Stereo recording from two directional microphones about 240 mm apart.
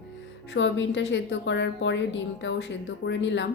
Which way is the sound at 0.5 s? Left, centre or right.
Left.